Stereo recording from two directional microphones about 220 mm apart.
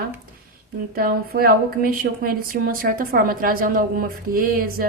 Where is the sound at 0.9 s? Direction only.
40° right (ahead or behind).